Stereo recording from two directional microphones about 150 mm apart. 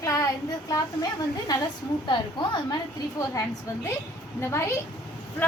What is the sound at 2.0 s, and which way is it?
Speech, 30° left (ahead or behind).